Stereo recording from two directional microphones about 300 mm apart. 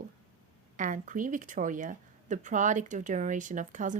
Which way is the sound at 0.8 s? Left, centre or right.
Right.